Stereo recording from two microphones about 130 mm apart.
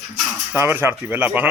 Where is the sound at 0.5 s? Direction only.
15° right (ahead or behind).